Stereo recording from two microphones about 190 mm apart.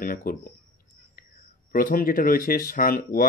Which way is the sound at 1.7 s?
45° left (ahead or behind).